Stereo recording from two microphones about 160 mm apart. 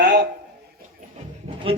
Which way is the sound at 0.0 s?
90° right.